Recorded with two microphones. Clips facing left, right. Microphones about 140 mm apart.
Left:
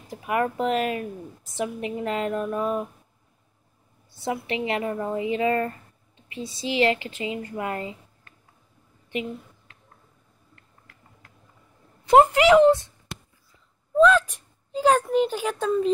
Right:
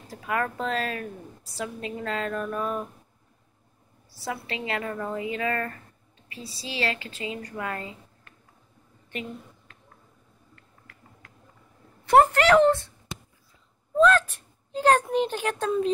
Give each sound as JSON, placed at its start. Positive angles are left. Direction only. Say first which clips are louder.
{"t": 0.1, "sound": "speech", "louder": "left 4 dB", "side_deg": 20}
{"t": 4.2, "sound": "speech", "louder": "left 5 dB", "side_deg": 20}
{"t": 12.1, "sound": "speech", "louder": "left 3 dB", "side_deg": 15}
{"t": 14.0, "sound": "a woman's voice", "louder": "left 2 dB", "side_deg": 10}